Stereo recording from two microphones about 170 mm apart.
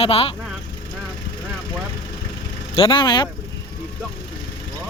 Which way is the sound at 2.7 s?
30° left (ahead or behind).